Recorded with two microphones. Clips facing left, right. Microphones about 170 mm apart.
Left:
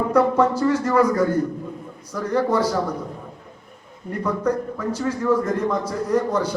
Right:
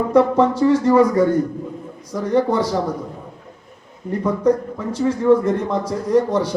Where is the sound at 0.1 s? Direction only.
30° right (ahead or behind).